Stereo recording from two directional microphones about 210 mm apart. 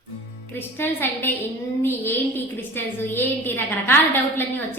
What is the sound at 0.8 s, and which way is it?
A woman's voice, 10° left (ahead or behind).